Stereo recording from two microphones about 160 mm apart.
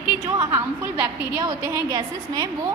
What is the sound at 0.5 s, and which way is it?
A woman's voice, 20° right (ahead or behind).